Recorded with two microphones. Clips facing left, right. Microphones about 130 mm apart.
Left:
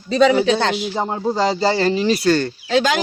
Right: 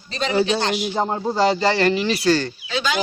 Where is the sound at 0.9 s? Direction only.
5° left (ahead or behind).